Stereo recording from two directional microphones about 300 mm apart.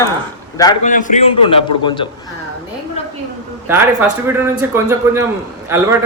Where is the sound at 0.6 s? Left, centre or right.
Centre.